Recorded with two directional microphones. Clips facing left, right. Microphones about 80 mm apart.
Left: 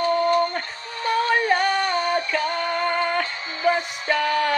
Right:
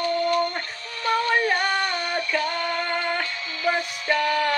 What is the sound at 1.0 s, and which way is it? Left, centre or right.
Music, left.